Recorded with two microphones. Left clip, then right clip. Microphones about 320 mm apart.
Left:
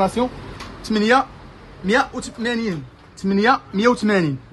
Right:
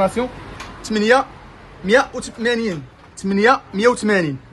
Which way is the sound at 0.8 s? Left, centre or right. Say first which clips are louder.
Right 2 dB; left.